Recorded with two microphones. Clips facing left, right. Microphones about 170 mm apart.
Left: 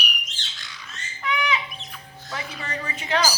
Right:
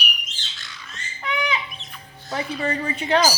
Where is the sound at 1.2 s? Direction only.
35° right (ahead or behind).